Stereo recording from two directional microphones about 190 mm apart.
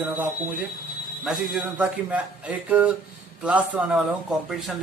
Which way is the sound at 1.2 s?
Centre (ahead or behind).